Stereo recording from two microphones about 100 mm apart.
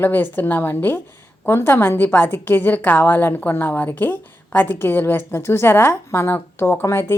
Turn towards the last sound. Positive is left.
turn(degrees=25)  # may be behind; listen again after turning